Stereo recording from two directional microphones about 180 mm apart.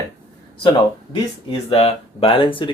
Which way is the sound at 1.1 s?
30° left (ahead or behind).